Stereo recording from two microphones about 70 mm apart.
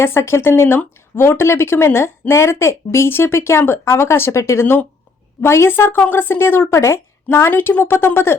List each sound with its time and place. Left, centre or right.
0.0 s speech: left
4.6 s speech: left
5.4 s speech: left